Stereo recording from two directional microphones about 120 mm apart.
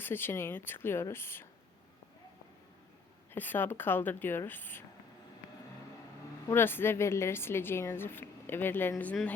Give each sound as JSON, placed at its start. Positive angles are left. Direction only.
{"t": 0.0, "sound": "speech", "side_deg": 20}
{"t": 3.3, "sound": "speech", "side_deg": 15}
{"t": 6.5, "sound": "speech", "side_deg": 20}